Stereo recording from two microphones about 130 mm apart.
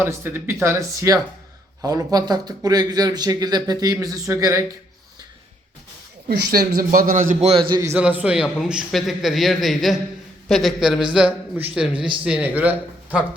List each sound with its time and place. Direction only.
0.0 s a man's voice: 15° right (ahead or behind)
6.7 s a man's voice: 90° right
7.4 s a man's voice: 40° right (ahead or behind)
7.9 s a man's voice: 10° right (ahead or behind)
8.5 s a man's voice: centre (ahead or behind)
11.9 s a man's voice: 40° right (ahead or behind)
12.2 s a man's voice: 10° right (ahead or behind)